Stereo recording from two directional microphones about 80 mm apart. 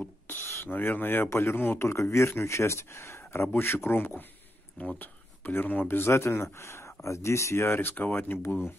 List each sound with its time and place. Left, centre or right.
0.3 s speech: left